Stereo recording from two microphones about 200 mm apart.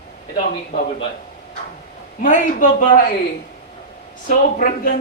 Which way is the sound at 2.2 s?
40° left (ahead or behind).